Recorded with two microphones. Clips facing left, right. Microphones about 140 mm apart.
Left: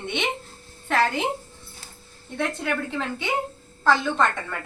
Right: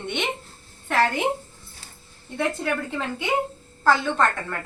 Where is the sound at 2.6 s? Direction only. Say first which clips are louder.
Even; centre (ahead or behind).